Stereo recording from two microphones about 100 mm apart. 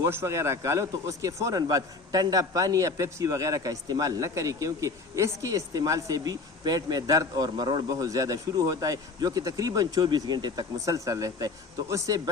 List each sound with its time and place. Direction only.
0.0 s a man's voice: 30° right (ahead or behind)